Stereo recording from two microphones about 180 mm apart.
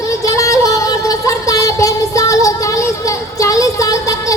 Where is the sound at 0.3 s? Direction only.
20° left (ahead or behind).